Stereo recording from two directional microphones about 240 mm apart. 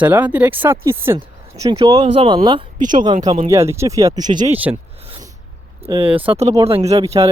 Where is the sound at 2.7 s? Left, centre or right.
Right.